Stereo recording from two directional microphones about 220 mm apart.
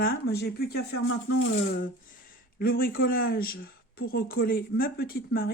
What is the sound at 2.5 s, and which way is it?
A man's voice, 40° left (ahead or behind).